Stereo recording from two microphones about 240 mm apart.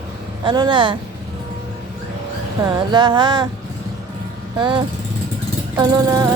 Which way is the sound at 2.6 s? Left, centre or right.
Centre.